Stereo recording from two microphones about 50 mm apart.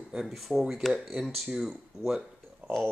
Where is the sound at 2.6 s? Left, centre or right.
Right.